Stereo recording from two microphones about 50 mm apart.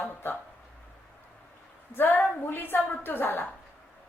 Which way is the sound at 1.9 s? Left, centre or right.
Left.